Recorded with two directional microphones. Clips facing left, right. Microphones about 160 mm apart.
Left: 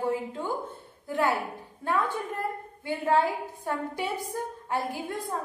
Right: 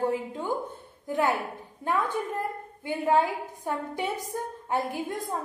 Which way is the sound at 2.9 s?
15° right (ahead or behind).